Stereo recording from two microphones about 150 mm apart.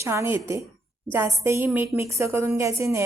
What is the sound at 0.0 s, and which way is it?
A woman's voice, 20° right (ahead or behind).